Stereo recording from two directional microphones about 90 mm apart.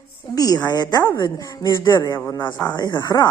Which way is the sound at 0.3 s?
45° left (ahead or behind).